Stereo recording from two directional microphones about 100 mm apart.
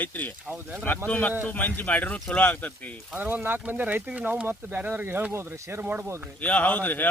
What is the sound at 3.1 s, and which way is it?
Speech, 20° right (ahead or behind).